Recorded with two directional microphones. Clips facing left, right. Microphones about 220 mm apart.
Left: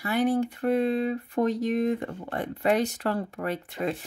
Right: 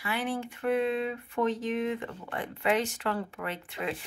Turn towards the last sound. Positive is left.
turn(degrees=40)  # may be behind; listen again after turning